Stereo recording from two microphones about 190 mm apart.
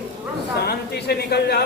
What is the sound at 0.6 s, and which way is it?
Speech, 60° left (ahead or behind).